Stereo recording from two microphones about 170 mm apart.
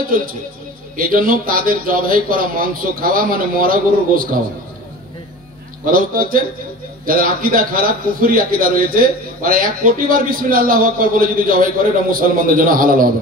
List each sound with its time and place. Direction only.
0.9 s a man's voice: 55° right (ahead or behind)
5.9 s a man's voice: 55° right (ahead or behind)